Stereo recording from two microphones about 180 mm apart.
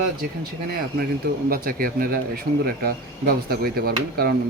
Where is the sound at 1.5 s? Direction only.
55° right (ahead or behind).